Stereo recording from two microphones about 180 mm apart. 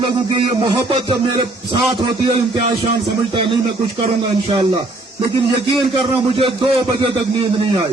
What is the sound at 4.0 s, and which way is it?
Speech, 30° right (ahead or behind).